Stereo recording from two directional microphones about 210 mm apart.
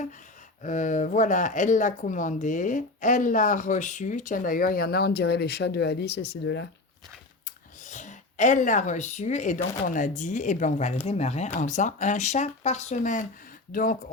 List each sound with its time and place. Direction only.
0.6 s speech: 35° left (ahead or behind); by 6.7 s 55° left (ahead or behind)
7.9 s speech: 35° left (ahead or behind)